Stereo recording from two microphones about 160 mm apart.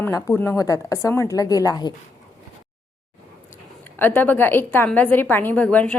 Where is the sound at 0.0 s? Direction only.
15° left (ahead or behind).